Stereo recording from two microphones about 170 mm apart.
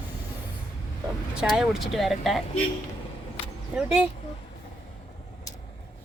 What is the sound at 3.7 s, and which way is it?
Speech, 5° right (ahead or behind).